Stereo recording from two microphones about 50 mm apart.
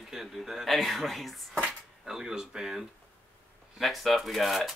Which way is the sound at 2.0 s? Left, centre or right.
Centre.